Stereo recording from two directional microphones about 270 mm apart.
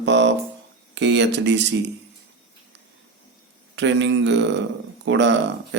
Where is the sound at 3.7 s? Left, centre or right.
Right.